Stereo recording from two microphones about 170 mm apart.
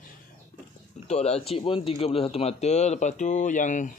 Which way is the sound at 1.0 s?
40° left (ahead or behind).